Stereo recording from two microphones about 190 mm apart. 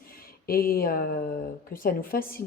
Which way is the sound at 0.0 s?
50° left (ahead or behind).